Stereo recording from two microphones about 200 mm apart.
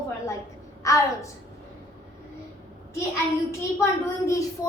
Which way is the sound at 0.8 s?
15° left (ahead or behind).